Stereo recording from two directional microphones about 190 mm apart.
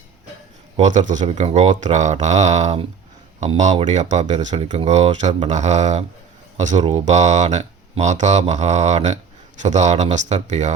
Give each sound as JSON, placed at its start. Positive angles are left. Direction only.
{"t": 0.8, "sound": "speech", "side_deg": -40}
{"t": 4.3, "sound": "speech", "side_deg": -30}